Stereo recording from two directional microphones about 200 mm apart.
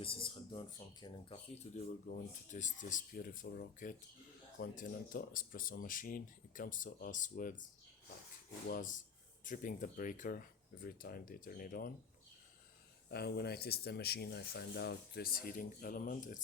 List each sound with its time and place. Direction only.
0.0 s speech: 25° left (ahead or behind)
2.0 s speech: 40° left (ahead or behind)
13.1 s speech: 55° left (ahead or behind)